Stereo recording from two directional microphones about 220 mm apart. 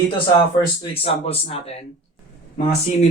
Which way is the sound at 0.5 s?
20° left (ahead or behind).